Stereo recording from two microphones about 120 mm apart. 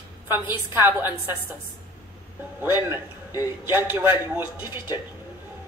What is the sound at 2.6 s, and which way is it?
A woman's voice, 20° right (ahead or behind).